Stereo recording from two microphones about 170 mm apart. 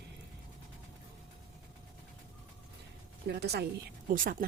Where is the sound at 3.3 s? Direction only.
75° right (ahead or behind).